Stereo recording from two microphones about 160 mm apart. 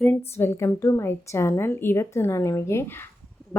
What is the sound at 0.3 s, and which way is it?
A woman's voice, 15° left (ahead or behind).